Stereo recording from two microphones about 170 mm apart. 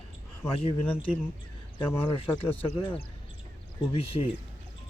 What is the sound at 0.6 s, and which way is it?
Speech, 35° left (ahead or behind).